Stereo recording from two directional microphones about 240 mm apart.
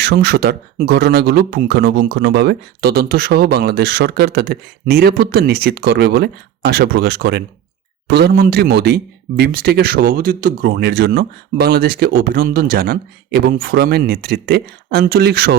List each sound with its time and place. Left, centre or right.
0.0 s a man's voice: right